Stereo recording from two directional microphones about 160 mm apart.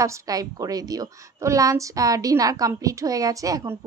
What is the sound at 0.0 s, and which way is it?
A woman's voice, 20° right (ahead or behind).